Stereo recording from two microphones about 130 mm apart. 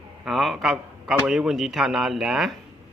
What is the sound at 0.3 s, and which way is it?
Speech, centre (ahead or behind).